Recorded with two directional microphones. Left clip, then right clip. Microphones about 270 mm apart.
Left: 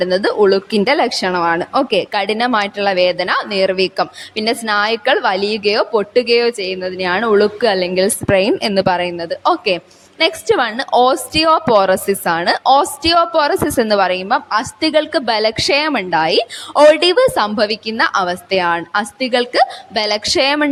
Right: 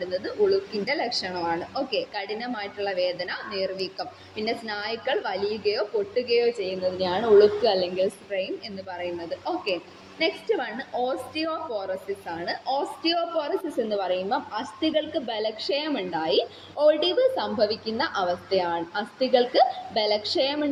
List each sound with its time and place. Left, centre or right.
0.0 s speech: left